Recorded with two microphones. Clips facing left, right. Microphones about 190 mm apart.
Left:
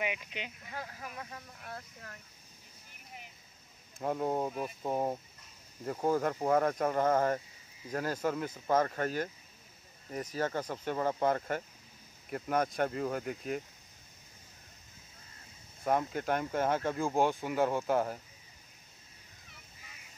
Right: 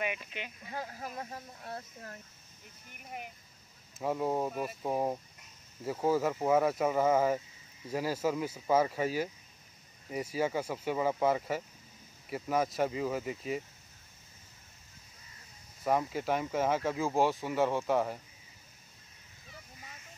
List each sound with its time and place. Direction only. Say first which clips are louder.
0.0 s speech: even; 15° left (ahead or behind)
0.7 s speech: right 3 dB; 30° right (ahead or behind)
3.1 s speech: right 8 dB; 60° right (ahead or behind)
4.0 s speech: right 1 dB; centre (ahead or behind)
15.8 s speech: right 1 dB; 5° right (ahead or behind)